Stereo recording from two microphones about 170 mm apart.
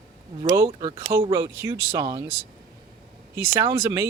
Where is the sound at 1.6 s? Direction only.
15° right (ahead or behind).